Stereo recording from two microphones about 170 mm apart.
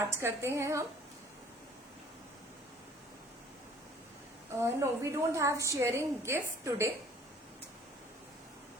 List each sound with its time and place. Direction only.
0.0 s a woman's voice: 15° right (ahead or behind)
4.5 s a woman's voice: 15° right (ahead or behind)